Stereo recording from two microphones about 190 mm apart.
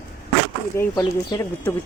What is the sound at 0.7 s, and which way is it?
Speech, 15° left (ahead or behind).